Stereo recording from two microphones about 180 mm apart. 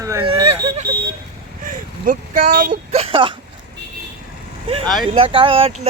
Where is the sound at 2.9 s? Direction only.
30° right (ahead or behind).